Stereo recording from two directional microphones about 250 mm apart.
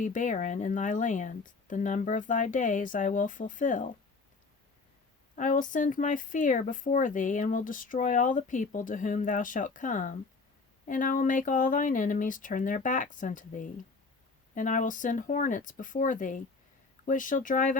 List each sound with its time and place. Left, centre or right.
0.0 s speech: left
5.4 s speech: left